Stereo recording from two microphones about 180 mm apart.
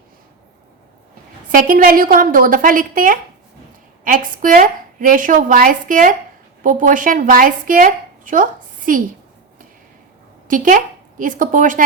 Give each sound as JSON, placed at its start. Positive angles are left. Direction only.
{"t": 1.5, "sound": "a woman's voice", "side_deg": -50}
{"t": 10.5, "sound": "a woman's voice", "side_deg": -50}